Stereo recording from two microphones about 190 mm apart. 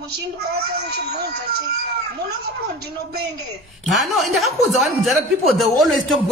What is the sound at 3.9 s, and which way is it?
A man's voice, centre (ahead or behind).